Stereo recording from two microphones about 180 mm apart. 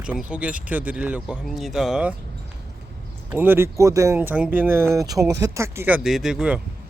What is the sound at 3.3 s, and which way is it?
Speech, 10° right (ahead or behind).